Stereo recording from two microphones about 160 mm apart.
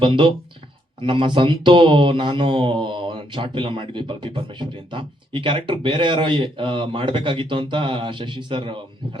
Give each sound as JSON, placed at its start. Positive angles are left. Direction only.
{"t": 0.0, "sound": "speech", "side_deg": -30}